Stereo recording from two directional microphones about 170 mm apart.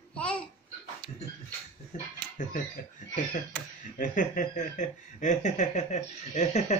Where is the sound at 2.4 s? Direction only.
50° left (ahead or behind).